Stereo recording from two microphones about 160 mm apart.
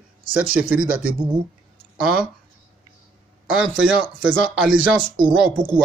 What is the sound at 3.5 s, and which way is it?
Speech, 5° right (ahead or behind).